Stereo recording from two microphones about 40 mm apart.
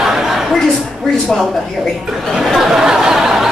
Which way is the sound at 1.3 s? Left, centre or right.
Centre.